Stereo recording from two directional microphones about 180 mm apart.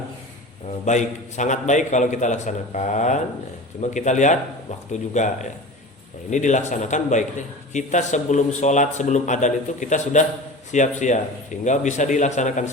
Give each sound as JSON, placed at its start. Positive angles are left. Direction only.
{"t": 0.9, "sound": "a man's voice", "side_deg": 40}